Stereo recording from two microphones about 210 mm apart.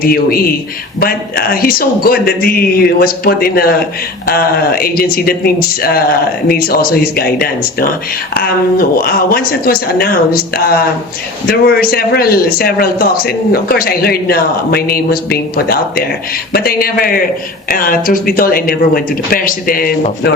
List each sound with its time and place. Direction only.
0.0 s speech: 45° left (ahead or behind)
6.5 s speech: 45° left (ahead or behind)
9.0 s speech: 45° left (ahead or behind)